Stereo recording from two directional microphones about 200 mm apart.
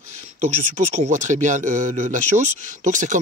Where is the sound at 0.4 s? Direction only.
35° right (ahead or behind).